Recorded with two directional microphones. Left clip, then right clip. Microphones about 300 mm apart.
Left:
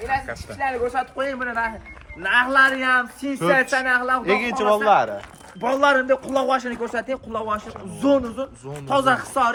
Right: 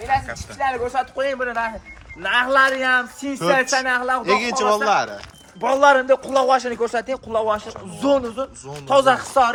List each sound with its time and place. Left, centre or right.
0.6 s a man's voice: right
4.3 s speech: centre
5.5 s a man's voice: right